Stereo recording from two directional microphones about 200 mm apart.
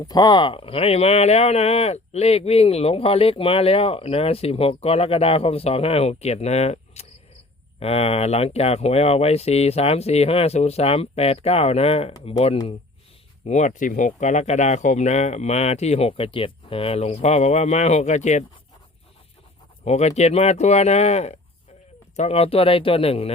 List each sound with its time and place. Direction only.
0.1 s speech: 20° left (ahead or behind)
13.4 s speech: 35° left (ahead or behind)
19.8 s speech: 35° left (ahead or behind)